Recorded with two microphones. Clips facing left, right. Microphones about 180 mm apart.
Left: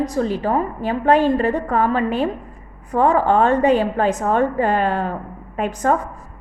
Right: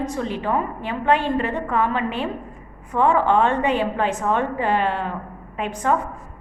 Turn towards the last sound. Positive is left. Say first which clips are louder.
# left 3 dB
turn(degrees=40)  # may be behind; listen again after turning